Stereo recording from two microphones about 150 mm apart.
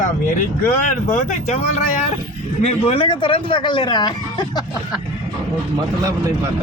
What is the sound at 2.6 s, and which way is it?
A man's voice, 40° left (ahead or behind).